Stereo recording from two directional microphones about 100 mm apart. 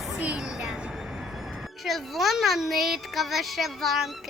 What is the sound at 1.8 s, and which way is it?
A child's voice, centre (ahead or behind).